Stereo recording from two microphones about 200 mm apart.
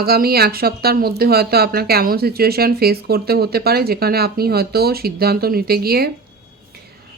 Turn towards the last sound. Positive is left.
turn(degrees=-50)  # may be behind; listen again after turning